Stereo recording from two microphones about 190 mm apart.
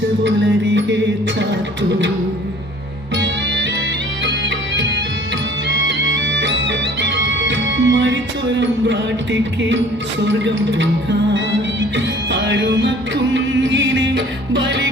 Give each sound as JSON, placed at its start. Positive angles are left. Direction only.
{"t": 0.3, "sound": "music", "side_deg": -70}
{"t": 3.2, "sound": "music", "side_deg": -75}